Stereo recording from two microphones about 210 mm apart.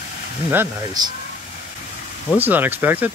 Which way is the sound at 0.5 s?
20° right (ahead or behind).